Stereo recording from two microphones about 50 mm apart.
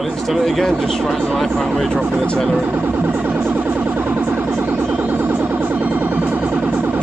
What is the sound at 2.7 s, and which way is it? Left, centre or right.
Music, right.